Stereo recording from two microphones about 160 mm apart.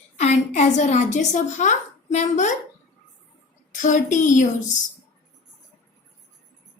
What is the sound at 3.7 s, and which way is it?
Speech, 50° left (ahead or behind).